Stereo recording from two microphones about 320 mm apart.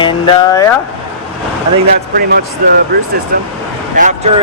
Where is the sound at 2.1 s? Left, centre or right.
Right.